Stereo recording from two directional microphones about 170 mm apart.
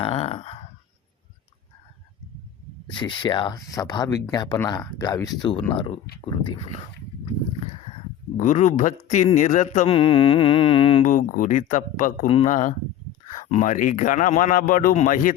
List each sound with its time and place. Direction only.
0.0 s a sound: 35° left (ahead or behind)
3.0 s speech: 25° left (ahead or behind)
8.4 s speech: 45° left (ahead or behind)
11.0 s speech: 50° left (ahead or behind)